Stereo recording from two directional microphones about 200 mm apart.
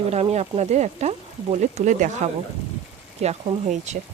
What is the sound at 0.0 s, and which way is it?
Speech, 30° right (ahead or behind).